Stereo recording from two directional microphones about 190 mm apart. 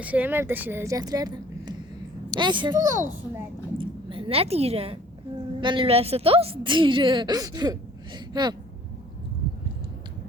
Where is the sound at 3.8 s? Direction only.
30° right (ahead or behind).